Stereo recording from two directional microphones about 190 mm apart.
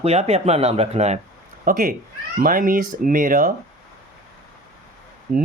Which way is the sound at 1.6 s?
50° right (ahead or behind).